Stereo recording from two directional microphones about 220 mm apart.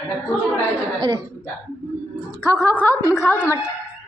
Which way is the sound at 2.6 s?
10° left (ahead or behind).